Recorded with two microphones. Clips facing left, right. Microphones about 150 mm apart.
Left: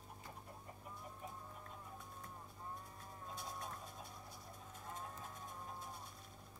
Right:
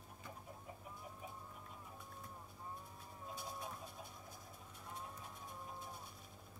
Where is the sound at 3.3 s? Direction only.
Centre (ahead or behind).